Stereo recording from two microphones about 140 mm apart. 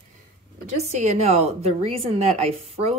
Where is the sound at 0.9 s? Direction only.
55° right (ahead or behind).